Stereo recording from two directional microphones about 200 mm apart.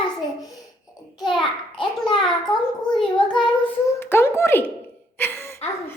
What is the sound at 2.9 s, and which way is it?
Child singing, 25° left (ahead or behind).